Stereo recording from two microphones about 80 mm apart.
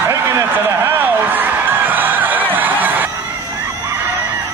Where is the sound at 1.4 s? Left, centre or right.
Right.